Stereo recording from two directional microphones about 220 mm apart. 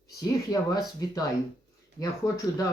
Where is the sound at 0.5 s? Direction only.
15° left (ahead or behind).